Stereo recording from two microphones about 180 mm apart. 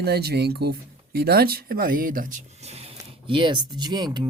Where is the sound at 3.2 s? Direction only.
25° right (ahead or behind).